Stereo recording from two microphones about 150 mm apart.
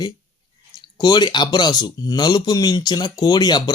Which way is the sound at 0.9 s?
25° left (ahead or behind).